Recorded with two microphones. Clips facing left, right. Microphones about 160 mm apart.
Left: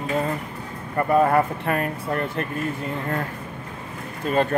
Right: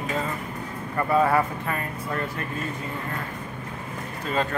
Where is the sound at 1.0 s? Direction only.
20° left (ahead or behind).